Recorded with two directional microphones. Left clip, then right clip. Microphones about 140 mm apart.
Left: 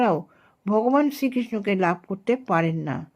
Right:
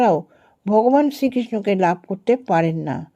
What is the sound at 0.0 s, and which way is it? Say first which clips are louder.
A woman's voice: right 5 dB; 25° right (ahead or behind).